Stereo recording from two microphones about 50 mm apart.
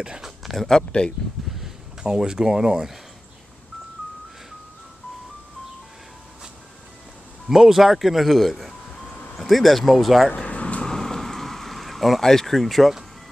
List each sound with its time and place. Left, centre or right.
0.0 s speech: centre
0.4 s a sound: centre
0.7 s speech: centre
2.0 s speech: centre
7.4 s speech: centre
10.3 s air conditioning: left
10.9 s a sound: centre